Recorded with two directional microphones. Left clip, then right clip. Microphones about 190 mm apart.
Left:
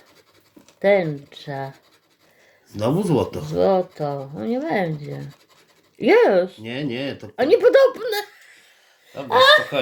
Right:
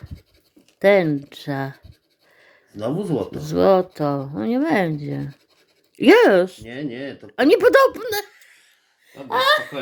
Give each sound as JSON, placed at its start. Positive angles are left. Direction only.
{"t": 0.8, "sound": "speech", "side_deg": -35}
{"t": 2.7, "sound": "speech", "side_deg": 50}
{"t": 3.4, "sound": "speech", "side_deg": -35}
{"t": 6.7, "sound": "speech", "side_deg": 50}
{"t": 7.3, "sound": "a child's voice", "side_deg": -35}